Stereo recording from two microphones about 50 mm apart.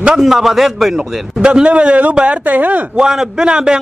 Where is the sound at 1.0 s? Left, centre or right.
Centre.